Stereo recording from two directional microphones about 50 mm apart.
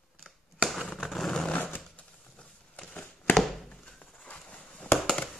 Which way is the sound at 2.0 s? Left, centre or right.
Left.